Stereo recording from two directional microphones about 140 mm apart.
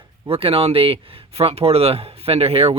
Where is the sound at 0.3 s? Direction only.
45° right (ahead or behind).